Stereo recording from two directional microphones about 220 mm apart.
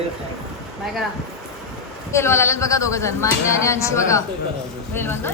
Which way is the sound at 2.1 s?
10° left (ahead or behind).